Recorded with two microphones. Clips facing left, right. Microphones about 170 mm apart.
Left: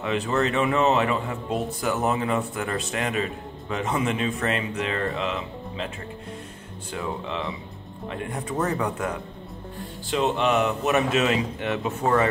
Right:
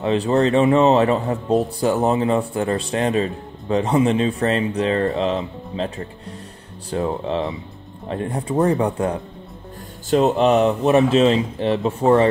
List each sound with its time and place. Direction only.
0.0 s a man's voice: 35° right (ahead or behind)
10.0 s a man's voice: 40° right (ahead or behind)